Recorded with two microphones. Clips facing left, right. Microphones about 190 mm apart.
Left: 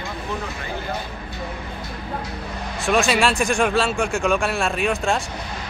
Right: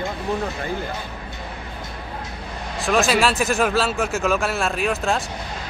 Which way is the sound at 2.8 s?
Centre (ahead or behind).